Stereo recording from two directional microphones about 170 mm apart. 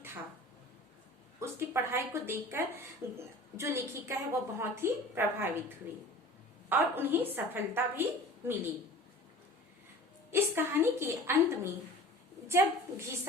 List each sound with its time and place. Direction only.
1.4 s a woman's voice: 15° right (ahead or behind)
10.3 s a woman's voice: 15° right (ahead or behind)